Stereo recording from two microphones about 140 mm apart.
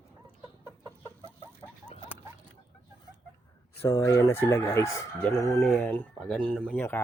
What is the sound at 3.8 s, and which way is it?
Speech, 20° left (ahead or behind).